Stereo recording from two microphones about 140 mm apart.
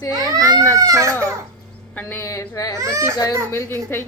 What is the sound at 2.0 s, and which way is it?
Speech, 15° left (ahead or behind).